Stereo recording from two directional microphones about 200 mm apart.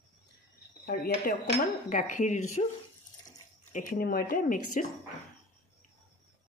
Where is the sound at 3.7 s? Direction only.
40° left (ahead or behind).